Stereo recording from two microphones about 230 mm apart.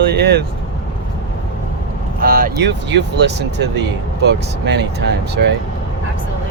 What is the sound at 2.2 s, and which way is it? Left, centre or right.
Speech, right.